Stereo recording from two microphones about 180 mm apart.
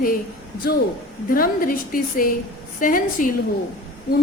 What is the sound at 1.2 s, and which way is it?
A woman's voice, 50° left (ahead or behind).